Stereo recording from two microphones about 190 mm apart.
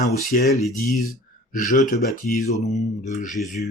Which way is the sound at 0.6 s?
Centre (ahead or behind).